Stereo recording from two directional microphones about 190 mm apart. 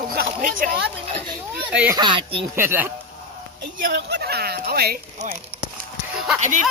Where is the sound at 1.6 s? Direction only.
5° right (ahead or behind).